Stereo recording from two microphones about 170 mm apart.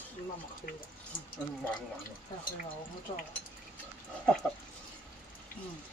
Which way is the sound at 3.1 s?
35° left (ahead or behind).